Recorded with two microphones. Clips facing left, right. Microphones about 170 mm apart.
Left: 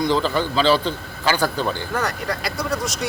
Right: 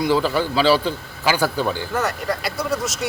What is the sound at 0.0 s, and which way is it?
A man's voice, 10° right (ahead or behind).